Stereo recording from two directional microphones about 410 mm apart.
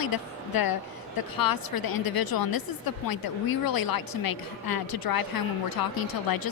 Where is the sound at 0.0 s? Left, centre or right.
Left.